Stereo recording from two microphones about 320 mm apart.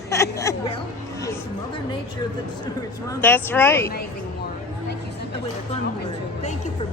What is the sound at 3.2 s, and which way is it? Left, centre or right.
Speech, centre.